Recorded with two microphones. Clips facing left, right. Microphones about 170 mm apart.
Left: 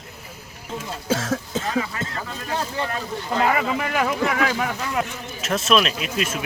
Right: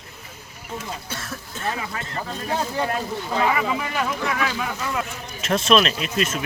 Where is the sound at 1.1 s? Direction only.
90° left.